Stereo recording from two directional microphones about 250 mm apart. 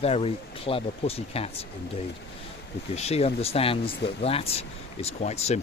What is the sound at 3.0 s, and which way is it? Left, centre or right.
Speech, left.